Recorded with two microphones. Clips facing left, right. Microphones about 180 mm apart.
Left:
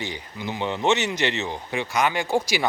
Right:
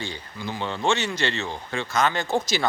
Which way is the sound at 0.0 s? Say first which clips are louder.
Left 1 dB; 20° left (ahead or behind).